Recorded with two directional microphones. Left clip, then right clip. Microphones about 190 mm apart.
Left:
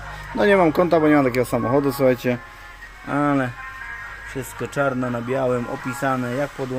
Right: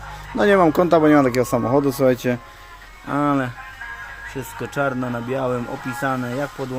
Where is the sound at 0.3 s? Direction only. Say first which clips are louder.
Right 1 dB; 15° right (ahead or behind).